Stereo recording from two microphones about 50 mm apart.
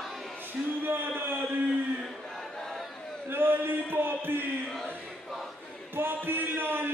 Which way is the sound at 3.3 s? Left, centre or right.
Right.